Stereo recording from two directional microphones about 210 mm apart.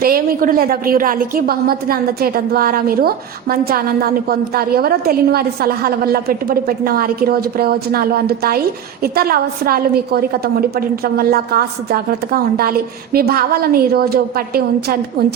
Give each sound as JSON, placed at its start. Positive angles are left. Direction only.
{"t": 0.0, "sound": "a woman's voice", "side_deg": -45}